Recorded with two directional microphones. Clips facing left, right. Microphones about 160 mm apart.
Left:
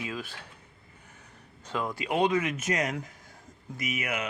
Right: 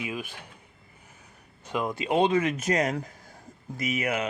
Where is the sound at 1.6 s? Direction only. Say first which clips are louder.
Right 3 dB; 15° right (ahead or behind).